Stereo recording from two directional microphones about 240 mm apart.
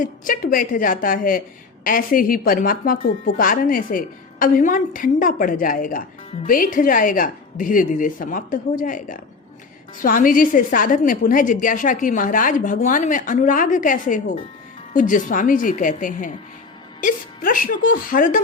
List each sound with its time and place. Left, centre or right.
0.0 s a woman's voice: left